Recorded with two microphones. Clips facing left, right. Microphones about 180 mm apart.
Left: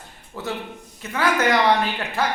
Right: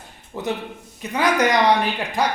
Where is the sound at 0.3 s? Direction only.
15° right (ahead or behind).